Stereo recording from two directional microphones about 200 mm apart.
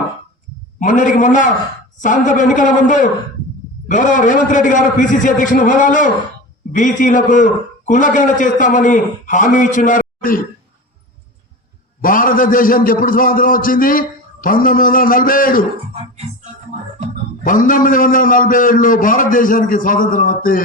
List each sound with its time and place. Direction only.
0.8 s a man's voice: 40° left (ahead or behind)
12.0 s a man's voice: 45° left (ahead or behind)
15.9 s music: 30° right (ahead or behind)
17.4 s a man's voice: 40° left (ahead or behind)